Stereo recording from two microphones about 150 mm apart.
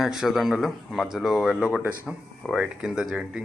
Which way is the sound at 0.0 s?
5° right (ahead or behind).